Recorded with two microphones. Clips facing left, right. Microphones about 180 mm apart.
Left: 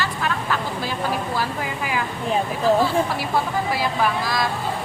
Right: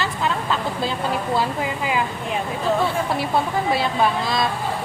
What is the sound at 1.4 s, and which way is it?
Speech, 20° right (ahead or behind).